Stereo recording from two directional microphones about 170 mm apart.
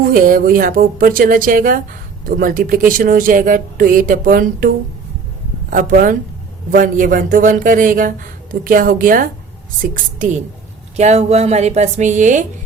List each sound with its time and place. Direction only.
0.0 s a woman's voice: 55° right (ahead or behind)
5.7 s a man's voice: 50° right (ahead or behind)